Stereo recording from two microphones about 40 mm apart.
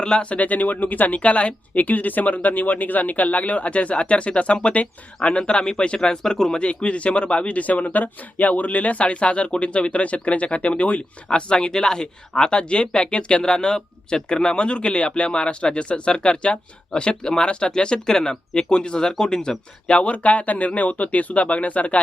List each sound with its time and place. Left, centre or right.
0.0 s speech: left
6.6 s speech: left
11.3 s speech: left
20.0 s speech: left